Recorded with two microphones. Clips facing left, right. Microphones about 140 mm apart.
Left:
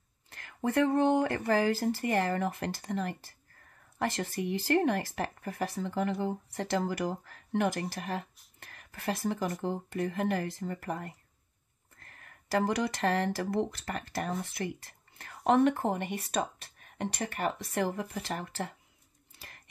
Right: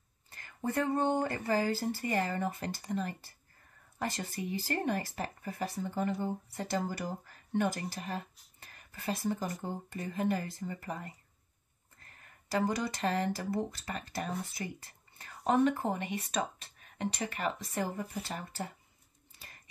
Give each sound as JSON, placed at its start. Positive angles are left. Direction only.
{"t": 0.3, "sound": "speech", "side_deg": 70}
{"t": 1.2, "sound": "speech", "side_deg": 60}